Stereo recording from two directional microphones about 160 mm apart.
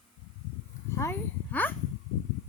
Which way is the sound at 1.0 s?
15° left (ahead or behind).